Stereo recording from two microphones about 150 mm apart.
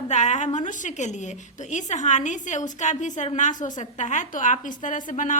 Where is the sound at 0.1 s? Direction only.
50° left (ahead or behind).